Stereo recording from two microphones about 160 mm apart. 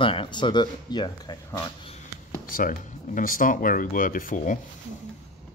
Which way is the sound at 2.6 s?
60° left (ahead or behind).